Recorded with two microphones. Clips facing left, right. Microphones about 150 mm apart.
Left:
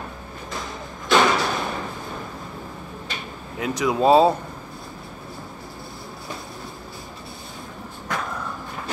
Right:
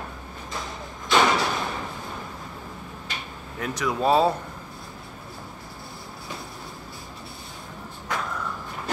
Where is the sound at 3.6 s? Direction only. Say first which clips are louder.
Left 5 dB; 15° left (ahead or behind).